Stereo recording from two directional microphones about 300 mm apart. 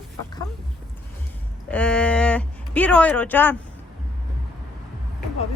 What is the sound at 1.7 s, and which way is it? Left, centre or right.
Speech, centre.